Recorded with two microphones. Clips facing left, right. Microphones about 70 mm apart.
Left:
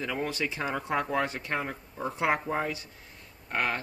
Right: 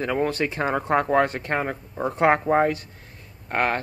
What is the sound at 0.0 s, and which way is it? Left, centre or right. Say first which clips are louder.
Speech: right 8 dB; right.